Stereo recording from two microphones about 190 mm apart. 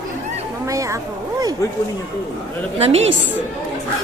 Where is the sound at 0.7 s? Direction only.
15° right (ahead or behind).